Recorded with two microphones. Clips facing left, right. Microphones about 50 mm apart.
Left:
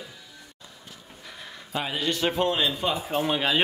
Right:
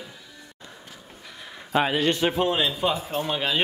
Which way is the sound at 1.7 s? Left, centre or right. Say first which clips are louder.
Right 6 dB; right.